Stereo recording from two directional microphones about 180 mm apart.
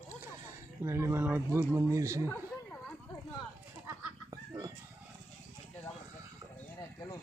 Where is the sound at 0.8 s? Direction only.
15° right (ahead or behind).